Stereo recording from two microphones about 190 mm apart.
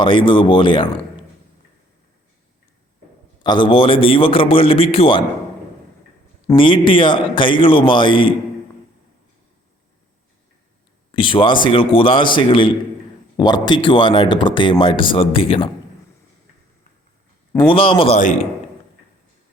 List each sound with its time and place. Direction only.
0.0 s speech: 25° left (ahead or behind)
3.4 s speech: 25° left (ahead or behind)
6.6 s speech: 25° left (ahead or behind)
11.1 s speech: 25° left (ahead or behind)
17.7 s speech: 30° left (ahead or behind)